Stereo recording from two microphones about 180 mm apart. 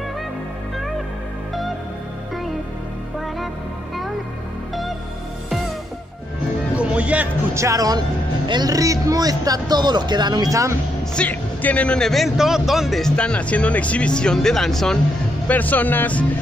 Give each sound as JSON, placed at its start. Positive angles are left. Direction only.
{"t": 6.8, "sound": "a man's voice", "side_deg": -5}
{"t": 11.1, "sound": "a man's voice", "side_deg": 10}